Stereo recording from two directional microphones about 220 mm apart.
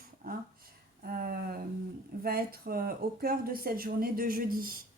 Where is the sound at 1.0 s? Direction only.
40° right (ahead or behind).